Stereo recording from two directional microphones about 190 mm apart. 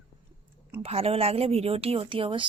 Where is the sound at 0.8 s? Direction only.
30° right (ahead or behind).